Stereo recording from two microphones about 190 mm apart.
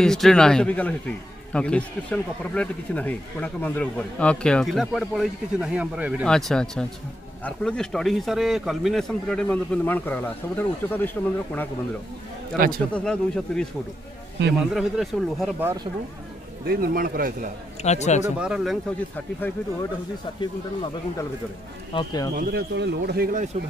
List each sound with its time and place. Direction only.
0.0 s a man's voice: 5° left (ahead or behind)
6.2 s a man's voice: 5° left (ahead or behind)
12.5 s a man's voice: 50° right (ahead or behind)
12.9 s a man's voice: 5° left (ahead or behind)
14.7 s a man's voice: centre (ahead or behind)
15.6 s speech: 20° right (ahead or behind)
16.6 s a man's voice: 50° right (ahead or behind)
17.8 s speech: 35° left (ahead or behind)
18.2 s a man's voice: 5° right (ahead or behind)
20.3 s speech: 25° left (ahead or behind)
22.3 s speech: 55° right (ahead or behind)